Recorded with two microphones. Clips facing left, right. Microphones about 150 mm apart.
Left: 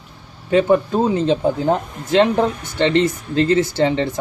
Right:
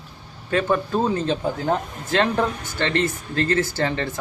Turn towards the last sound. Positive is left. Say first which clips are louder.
# left 6 dB
turn(degrees=20)  # may be behind; listen again after turning